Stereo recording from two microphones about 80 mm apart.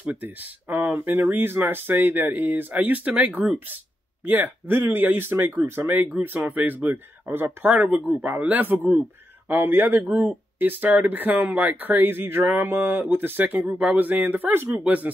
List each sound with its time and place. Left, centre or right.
0.0 s speech: centre